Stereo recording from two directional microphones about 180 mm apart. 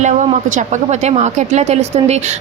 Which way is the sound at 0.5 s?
40° right (ahead or behind).